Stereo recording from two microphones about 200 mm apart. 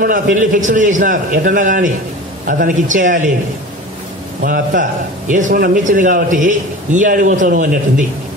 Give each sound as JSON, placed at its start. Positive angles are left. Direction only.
{"t": 0.0, "sound": "a man's voice", "side_deg": -40}
{"t": 4.4, "sound": "a man's voice", "side_deg": -45}